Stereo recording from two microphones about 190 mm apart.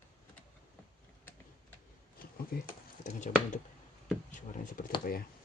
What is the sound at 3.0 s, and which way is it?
Speech, 40° left (ahead or behind).